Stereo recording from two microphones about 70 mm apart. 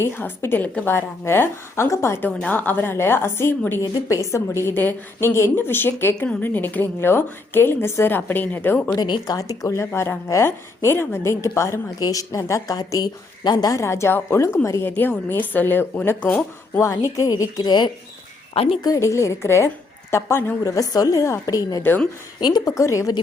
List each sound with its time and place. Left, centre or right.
0.0 s a woman's voice: left
2.2 s a woman's voice: left
4.1 s a woman's voice: left
9.0 s speech: left
9.4 s a woman's voice: left
11.9 s speech: left
13.7 s a woman's voice: left
14.8 s speech: left
16.8 s a woman's voice: left
17.6 s speech: left
18.9 s a woman's voice: left
20.7 s speech: left
22.4 s speech: left